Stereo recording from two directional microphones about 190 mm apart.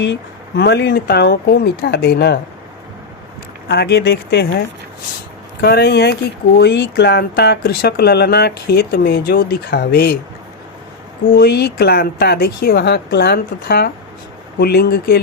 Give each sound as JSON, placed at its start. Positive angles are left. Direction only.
{"t": 0.0, "sound": "speech", "side_deg": 65}
{"t": 3.7, "sound": "speech", "side_deg": 60}
{"t": 5.6, "sound": "speech", "side_deg": 60}
{"t": 11.3, "sound": "speech", "side_deg": 55}